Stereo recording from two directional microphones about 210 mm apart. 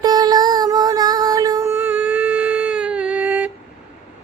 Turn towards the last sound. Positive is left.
turn(degrees=-5)  # may be behind; listen again after turning